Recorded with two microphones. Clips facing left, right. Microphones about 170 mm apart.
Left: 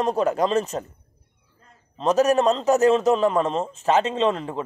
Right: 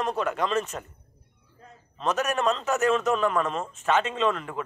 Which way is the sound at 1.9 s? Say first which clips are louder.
Left 8 dB; 30° left (ahead or behind).